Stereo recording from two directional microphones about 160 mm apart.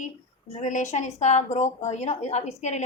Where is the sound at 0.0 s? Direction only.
45° left (ahead or behind).